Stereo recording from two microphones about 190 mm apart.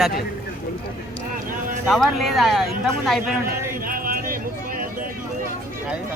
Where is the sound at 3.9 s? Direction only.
50° right (ahead or behind).